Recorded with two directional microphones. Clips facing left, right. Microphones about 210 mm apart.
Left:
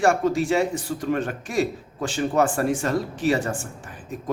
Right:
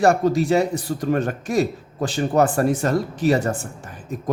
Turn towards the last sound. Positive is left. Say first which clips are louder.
# right 3 dB
turn(degrees=-40)  # may be behind; listen again after turning